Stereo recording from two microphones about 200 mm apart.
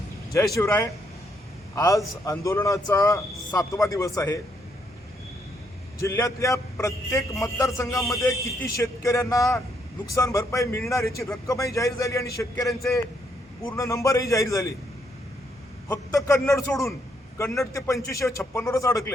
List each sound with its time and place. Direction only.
0.3 s a man's voice: 15° left (ahead or behind)
6.0 s a man's voice: 15° left (ahead or behind)
13.7 s a man's voice: 15° left (ahead or behind)
15.9 s a man's voice: 15° left (ahead or behind)